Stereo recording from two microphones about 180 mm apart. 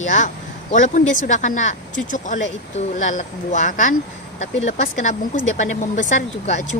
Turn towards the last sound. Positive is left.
turn(degrees=45)  # may be behind; listen again after turning